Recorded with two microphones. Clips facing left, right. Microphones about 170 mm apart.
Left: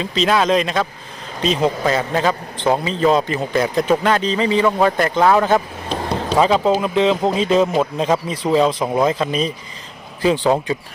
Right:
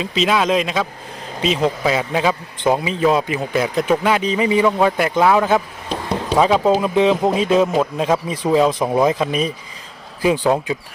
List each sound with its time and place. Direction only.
0.0 s a man's voice: 5° right (ahead or behind)